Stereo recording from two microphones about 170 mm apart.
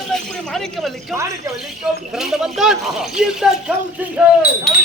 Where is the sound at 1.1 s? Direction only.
15° right (ahead or behind).